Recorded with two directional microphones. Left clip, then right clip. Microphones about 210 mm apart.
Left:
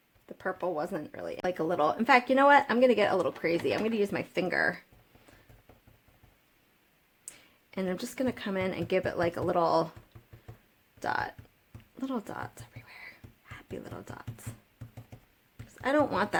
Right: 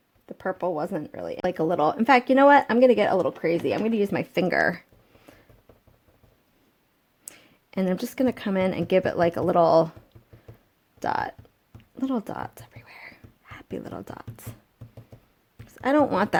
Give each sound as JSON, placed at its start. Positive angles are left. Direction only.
{"t": 0.3, "sound": "speech", "side_deg": -35}
{"t": 7.3, "sound": "speech", "side_deg": -40}
{"t": 11.0, "sound": "speech", "side_deg": -35}
{"t": 11.9, "sound": "a sound", "side_deg": -35}
{"t": 15.6, "sound": "speech", "side_deg": -40}